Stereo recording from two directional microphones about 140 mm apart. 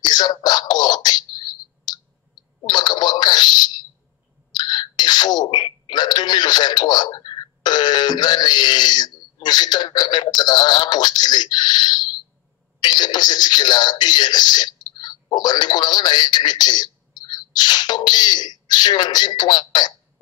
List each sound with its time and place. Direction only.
0.0 s a sound: 30° left (ahead or behind)
2.6 s telephone: 30° left (ahead or behind)
4.5 s a man's voice: 30° left (ahead or behind)